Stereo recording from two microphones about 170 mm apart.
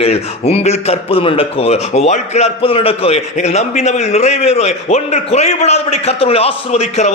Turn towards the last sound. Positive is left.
turn(degrees=40)  # may be behind; listen again after turning